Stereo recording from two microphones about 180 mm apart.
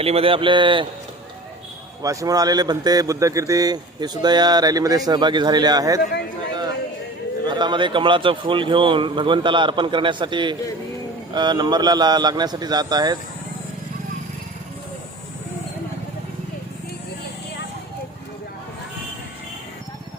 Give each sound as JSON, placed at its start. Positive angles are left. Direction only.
{"t": 0.0, "sound": "speech", "side_deg": -30}
{"t": 2.0, "sound": "speech", "side_deg": -20}
{"t": 7.4, "sound": "speech", "side_deg": -25}